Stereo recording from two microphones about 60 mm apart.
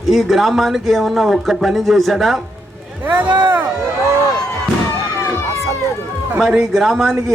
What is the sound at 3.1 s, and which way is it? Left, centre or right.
Speech, right.